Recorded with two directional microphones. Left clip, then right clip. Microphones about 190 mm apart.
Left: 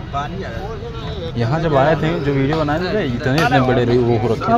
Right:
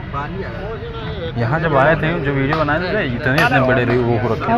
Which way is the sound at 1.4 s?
30° left (ahead or behind).